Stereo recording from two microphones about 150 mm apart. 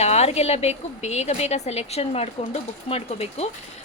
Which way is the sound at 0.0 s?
45° left (ahead or behind).